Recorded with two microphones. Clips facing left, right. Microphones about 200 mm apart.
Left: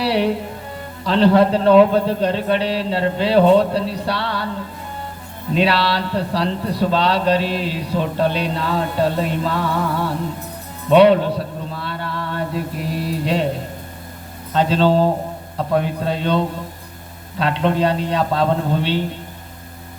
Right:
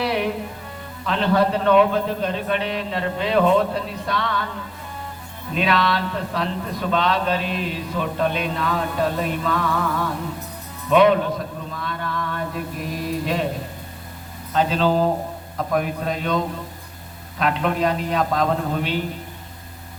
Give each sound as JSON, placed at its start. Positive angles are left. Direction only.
{"t": 0.0, "sound": "music", "side_deg": 30}
{"t": 1.0, "sound": "a man's voice", "side_deg": 30}
{"t": 5.5, "sound": "a man's voice", "side_deg": 35}
{"t": 10.8, "sound": "mantra", "side_deg": 30}
{"t": 14.5, "sound": "a man's voice", "side_deg": 30}
{"t": 17.4, "sound": "a man's voice", "side_deg": 30}